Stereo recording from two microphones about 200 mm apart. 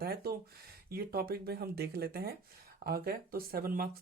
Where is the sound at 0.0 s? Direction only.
50° right (ahead or behind).